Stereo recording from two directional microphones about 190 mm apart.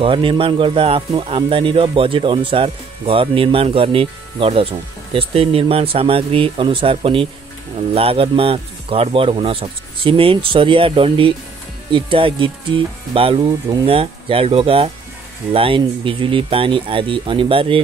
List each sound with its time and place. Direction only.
0.0 s speech: 25° right (ahead or behind)